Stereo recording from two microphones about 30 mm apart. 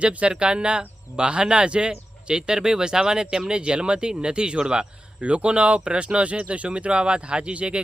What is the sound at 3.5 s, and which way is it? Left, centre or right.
Speech, right.